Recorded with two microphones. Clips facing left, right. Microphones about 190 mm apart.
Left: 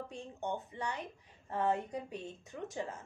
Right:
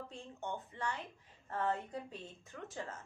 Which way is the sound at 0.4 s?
15° left (ahead or behind).